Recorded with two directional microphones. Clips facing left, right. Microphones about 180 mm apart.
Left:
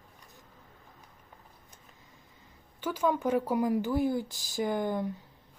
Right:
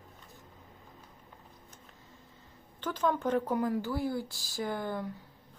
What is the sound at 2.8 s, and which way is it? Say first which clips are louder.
A woman's voice: left 2 dB; 10° left (ahead or behind).